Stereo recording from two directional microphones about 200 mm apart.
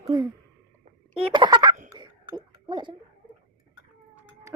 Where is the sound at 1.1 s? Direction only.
25° right (ahead or behind).